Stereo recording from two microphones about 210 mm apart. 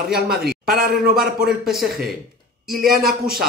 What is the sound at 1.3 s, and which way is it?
A man's voice, centre (ahead or behind).